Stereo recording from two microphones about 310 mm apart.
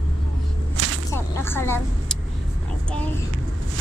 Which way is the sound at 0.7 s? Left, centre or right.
Right.